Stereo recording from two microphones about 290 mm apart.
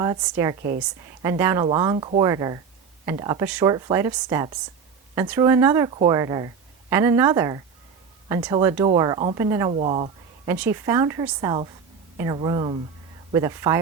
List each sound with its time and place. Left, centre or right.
0.0 s a woman's voice: centre
10.5 s speech: centre